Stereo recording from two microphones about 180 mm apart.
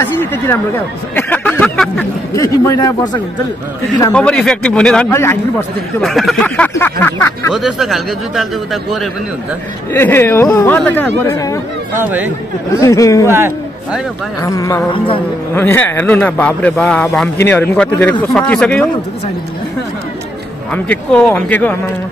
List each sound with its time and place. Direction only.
0.0 s speech: 10° left (ahead or behind)
2.3 s a man's voice: 20° left (ahead or behind)
4.1 s a man's voice: 5° left (ahead or behind)
6.0 s speech: centre (ahead or behind)
7.5 s a man's voice: centre (ahead or behind)
9.9 s speech: 15° left (ahead or behind)
11.9 s speech: 10° right (ahead or behind)
12.8 s speech: 20° left (ahead or behind)
14.4 s speech: 20° left (ahead or behind)
20.7 s speech: 5° left (ahead or behind)